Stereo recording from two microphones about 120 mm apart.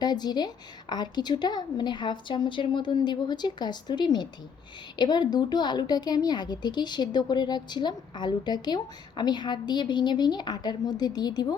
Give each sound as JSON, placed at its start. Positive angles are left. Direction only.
{"t": 0.0, "sound": "a woman's voice", "side_deg": 35}